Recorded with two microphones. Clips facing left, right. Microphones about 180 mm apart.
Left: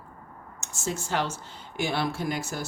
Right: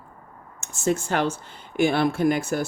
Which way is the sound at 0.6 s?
55° right (ahead or behind).